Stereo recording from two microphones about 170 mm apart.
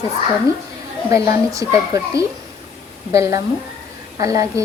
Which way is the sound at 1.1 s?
20° right (ahead or behind).